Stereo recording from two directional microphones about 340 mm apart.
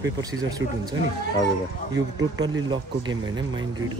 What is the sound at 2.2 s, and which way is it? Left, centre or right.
Speech, centre.